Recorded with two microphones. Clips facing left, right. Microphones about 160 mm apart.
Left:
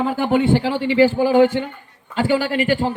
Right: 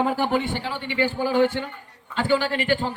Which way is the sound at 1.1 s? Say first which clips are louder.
Left 6 dB; 15° left (ahead or behind).